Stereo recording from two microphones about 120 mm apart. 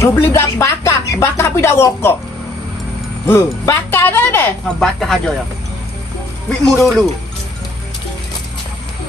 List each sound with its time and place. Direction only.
0.0 s speech: 20° left (ahead or behind)
3.3 s speech: 20° left (ahead or behind)
4.7 s speech: centre (ahead or behind)
6.6 s speech: 5° left (ahead or behind)